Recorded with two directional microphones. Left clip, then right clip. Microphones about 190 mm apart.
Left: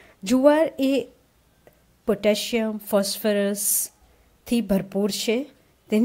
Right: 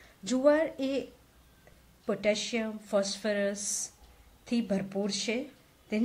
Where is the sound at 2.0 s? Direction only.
50° left (ahead or behind).